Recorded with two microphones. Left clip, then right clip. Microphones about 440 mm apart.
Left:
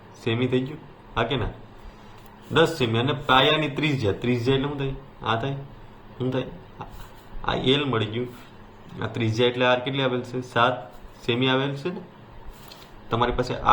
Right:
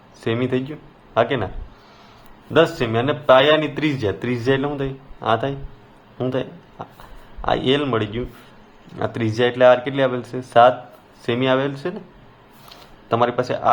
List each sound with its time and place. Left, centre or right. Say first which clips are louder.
0.3 s a man's voice: right 3 dB; centre
2.5 s a man's voice: right 4 dB; centre
13.1 s speech: right 5 dB; centre